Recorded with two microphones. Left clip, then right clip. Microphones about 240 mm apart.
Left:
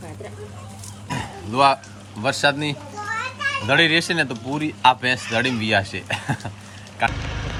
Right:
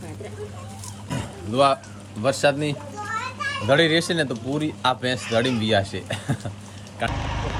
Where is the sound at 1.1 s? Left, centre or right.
Centre.